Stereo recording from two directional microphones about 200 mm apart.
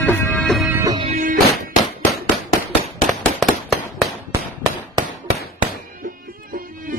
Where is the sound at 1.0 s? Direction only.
40° right (ahead or behind).